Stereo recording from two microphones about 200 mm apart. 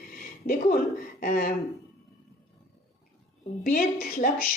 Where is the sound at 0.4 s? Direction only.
45° left (ahead or behind).